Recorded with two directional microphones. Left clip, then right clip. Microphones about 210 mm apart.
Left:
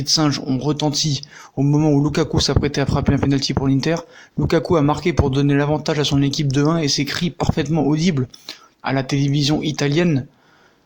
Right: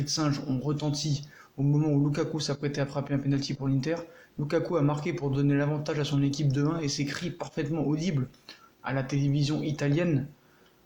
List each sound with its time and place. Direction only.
0.0 s speech: 45° left (ahead or behind)